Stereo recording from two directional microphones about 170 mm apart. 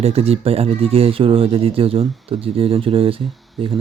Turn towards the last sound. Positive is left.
turn(degrees=0)  # may be behind; listen again after turning